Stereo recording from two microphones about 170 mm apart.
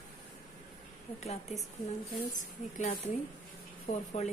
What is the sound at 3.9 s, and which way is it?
Speech, 45° left (ahead or behind).